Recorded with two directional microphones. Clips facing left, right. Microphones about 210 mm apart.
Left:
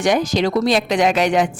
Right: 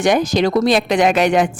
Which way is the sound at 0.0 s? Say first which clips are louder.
Right 2 dB; 50° right (ahead or behind).